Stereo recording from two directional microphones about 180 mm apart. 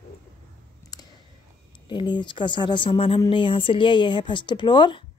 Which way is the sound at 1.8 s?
25° left (ahead or behind).